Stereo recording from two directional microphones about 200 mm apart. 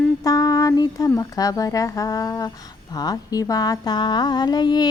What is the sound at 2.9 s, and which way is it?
Speech, 20° left (ahead or behind).